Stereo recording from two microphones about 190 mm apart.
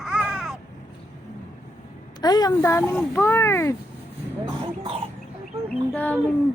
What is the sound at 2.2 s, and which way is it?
A woman's voice, 20° left (ahead or behind).